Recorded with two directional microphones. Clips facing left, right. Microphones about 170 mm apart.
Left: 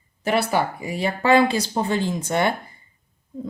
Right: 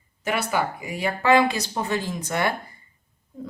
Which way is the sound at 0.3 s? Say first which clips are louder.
Left 4 dB; 30° left (ahead or behind).